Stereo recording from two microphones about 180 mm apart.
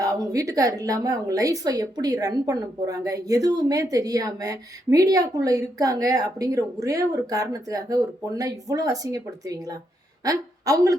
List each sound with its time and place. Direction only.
0.0 s a woman's voice: 20° right (ahead or behind)